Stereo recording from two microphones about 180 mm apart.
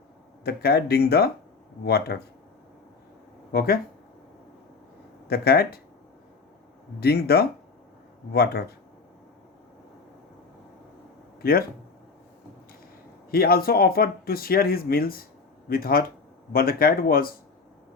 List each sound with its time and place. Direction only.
0.4 s speech: 60° left (ahead or behind)
3.5 s speech: 55° left (ahead or behind)
5.3 s speech: 60° left (ahead or behind)
7.0 s speech: 60° left (ahead or behind)
11.4 s speech: 55° left (ahead or behind)
13.3 s speech: 55° left (ahead or behind)